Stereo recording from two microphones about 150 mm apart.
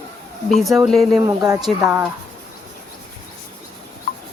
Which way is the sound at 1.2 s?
20° right (ahead or behind).